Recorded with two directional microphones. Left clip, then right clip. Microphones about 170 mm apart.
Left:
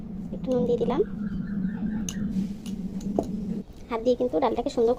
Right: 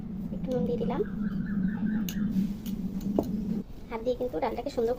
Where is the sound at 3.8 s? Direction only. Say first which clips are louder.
Left 6 dB; 50° left (ahead or behind).